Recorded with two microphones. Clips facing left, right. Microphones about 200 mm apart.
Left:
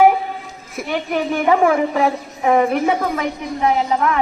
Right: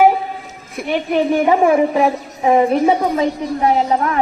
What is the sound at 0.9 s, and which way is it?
A woman's voice, 20° right (ahead or behind).